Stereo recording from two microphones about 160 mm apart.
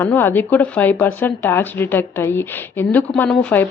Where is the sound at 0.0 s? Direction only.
15° left (ahead or behind).